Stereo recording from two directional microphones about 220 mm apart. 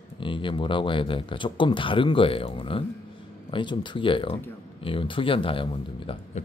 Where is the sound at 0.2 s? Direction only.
20° left (ahead or behind).